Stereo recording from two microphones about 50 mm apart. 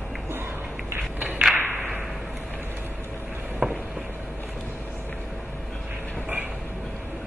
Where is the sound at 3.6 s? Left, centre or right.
Right.